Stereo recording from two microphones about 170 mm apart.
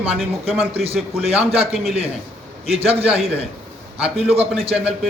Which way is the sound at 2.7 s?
35° right (ahead or behind).